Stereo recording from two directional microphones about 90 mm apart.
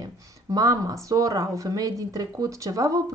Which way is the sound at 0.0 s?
45° right (ahead or behind).